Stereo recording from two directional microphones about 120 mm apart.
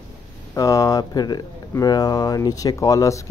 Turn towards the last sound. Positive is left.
turn(degrees=25)  # may be behind; listen again after turning